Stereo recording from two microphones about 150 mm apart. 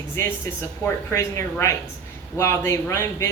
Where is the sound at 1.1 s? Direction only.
20° left (ahead or behind).